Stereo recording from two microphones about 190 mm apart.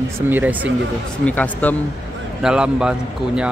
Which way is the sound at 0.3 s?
10° right (ahead or behind).